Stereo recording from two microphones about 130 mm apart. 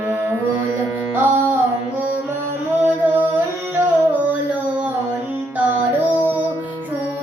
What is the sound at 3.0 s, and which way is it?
Music, 15° right (ahead or behind).